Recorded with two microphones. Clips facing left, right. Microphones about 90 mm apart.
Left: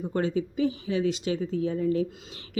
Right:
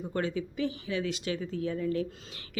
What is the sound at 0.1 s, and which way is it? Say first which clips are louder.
Speech: left 4 dB; 30° left (ahead or behind).